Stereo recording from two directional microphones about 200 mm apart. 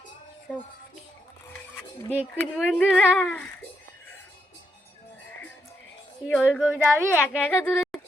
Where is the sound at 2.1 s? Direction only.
5° right (ahead or behind).